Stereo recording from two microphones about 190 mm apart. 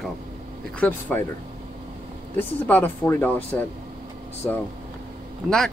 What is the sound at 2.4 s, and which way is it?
Speech, 10° left (ahead or behind).